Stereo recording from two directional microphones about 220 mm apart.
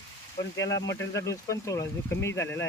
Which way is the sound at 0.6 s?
15° left (ahead or behind).